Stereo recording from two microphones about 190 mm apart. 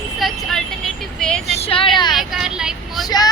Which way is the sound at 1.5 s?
30° left (ahead or behind).